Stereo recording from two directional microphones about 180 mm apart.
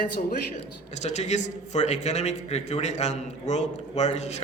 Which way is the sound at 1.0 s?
40° left (ahead or behind).